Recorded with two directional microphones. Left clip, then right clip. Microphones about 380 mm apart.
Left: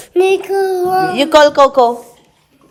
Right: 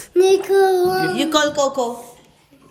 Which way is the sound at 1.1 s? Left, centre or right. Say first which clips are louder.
Left 9 dB; left.